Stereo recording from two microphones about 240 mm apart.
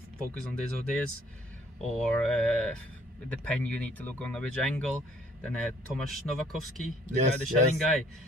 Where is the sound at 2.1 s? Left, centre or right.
Centre.